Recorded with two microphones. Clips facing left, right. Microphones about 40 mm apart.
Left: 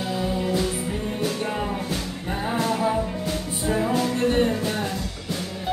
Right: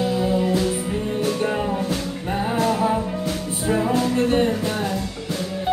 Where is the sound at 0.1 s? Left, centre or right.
Centre.